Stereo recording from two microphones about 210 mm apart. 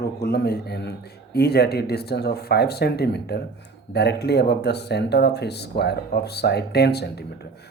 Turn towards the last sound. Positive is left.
turn(degrees=50)  # may be behind; listen again after turning